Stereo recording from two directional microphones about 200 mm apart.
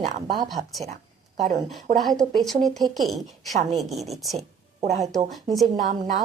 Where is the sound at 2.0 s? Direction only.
Centre (ahead or behind).